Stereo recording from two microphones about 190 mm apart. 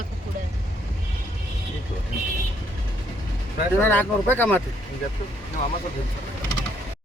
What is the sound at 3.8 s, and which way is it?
Speech, 10° left (ahead or behind).